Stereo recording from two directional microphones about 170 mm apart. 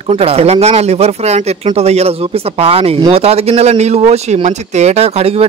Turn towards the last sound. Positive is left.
turn(degrees=-35)  # may be behind; listen again after turning